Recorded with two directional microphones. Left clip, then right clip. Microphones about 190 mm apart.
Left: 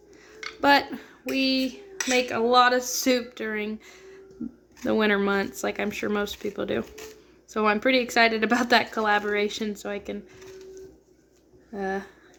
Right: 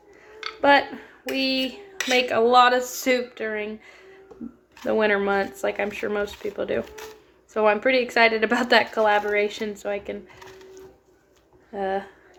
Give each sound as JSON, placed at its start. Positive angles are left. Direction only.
{"t": 0.6, "sound": "speech", "side_deg": 85}
{"t": 1.3, "sound": "speech", "side_deg": 50}
{"t": 2.0, "sound": "speech", "side_deg": 40}
{"t": 2.6, "sound": "speech", "side_deg": 30}
{"t": 3.0, "sound": "speech", "side_deg": 60}
{"t": 4.8, "sound": "speech", "side_deg": 60}
{"t": 11.7, "sound": "speech", "side_deg": 45}